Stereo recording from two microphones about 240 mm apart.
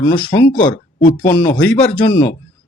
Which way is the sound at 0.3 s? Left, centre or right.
Centre.